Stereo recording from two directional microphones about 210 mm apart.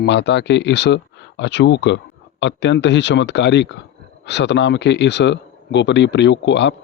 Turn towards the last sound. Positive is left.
turn(degrees=55)  # may be behind; listen again after turning